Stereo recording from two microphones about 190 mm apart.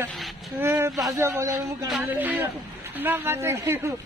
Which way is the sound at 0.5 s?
15° right (ahead or behind).